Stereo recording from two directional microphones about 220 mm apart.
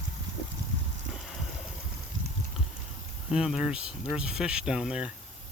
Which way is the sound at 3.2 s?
5° right (ahead or behind).